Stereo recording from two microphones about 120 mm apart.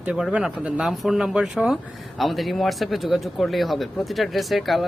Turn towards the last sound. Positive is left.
turn(degrees=0)  # may be behind; listen again after turning